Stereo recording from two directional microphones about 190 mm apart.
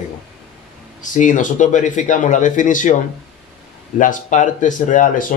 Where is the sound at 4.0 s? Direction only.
40° left (ahead or behind).